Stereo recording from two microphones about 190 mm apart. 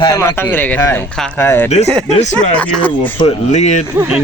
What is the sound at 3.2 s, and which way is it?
Speech, 35° left (ahead or behind).